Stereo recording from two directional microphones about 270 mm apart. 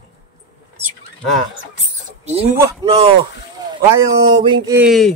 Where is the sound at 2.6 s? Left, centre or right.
Centre.